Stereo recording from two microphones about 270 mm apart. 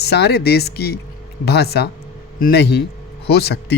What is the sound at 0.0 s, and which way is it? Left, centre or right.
Speech, left.